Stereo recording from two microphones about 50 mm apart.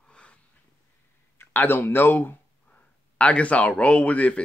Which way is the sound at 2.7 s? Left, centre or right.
Left.